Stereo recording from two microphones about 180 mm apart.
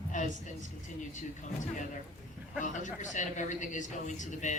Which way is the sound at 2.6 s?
45° left (ahead or behind).